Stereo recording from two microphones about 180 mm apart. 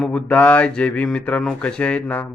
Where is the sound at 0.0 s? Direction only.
5° left (ahead or behind).